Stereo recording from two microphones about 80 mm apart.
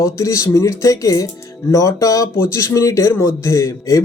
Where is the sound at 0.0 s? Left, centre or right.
Left.